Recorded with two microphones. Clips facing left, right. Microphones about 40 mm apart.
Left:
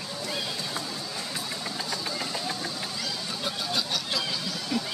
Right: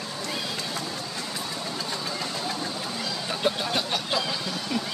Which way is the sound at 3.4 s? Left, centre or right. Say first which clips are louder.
Right 5 dB; right.